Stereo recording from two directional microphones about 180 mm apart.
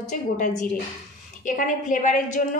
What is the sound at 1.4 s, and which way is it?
Speech, 45° left (ahead or behind).